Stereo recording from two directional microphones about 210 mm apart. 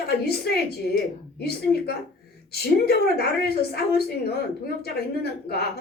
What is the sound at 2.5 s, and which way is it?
A woman's voice, 50° left (ahead or behind).